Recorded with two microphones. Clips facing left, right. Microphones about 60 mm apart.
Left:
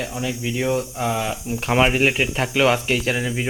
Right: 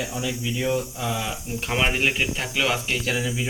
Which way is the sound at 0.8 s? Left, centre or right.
Left.